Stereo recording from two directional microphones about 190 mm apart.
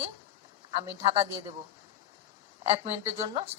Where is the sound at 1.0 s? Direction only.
35° right (ahead or behind).